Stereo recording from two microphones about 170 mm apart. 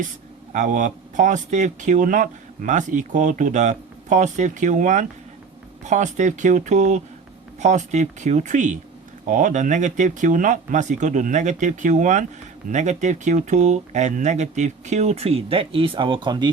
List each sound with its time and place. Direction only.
0.5 s speech: 45° right (ahead or behind); by 16.5 s 25° right (ahead or behind)